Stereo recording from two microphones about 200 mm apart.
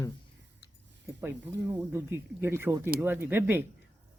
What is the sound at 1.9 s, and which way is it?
Speech, 10° right (ahead or behind).